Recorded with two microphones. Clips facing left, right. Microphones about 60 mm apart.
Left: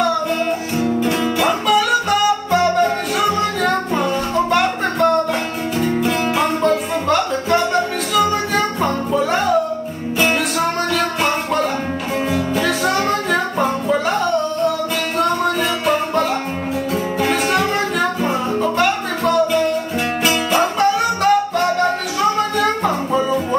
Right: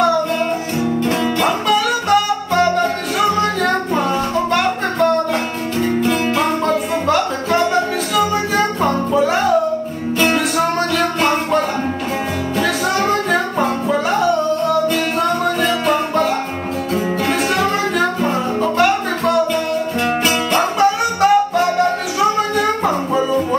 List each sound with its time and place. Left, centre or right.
1.4 s music: centre
12.5 s music: centre
16.9 s music: centre
20.8 s music: centre